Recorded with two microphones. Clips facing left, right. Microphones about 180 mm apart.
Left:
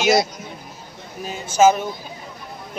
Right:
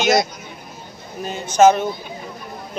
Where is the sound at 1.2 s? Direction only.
5° left (ahead or behind).